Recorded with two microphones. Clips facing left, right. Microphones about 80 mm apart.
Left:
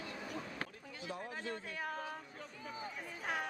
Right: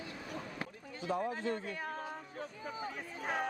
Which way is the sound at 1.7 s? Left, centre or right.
Centre.